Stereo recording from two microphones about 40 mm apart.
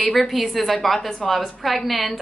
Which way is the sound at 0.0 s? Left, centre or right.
Centre.